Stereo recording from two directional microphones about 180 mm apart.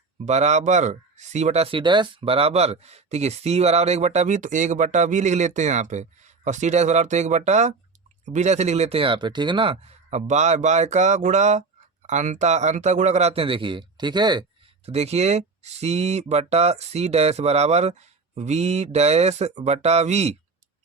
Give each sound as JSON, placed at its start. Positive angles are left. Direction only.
{"t": 0.3, "sound": "speech", "side_deg": -40}
{"t": 14.8, "sound": "speech", "side_deg": -35}